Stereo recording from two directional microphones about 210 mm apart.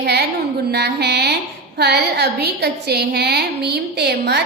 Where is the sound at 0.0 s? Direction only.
50° right (ahead or behind).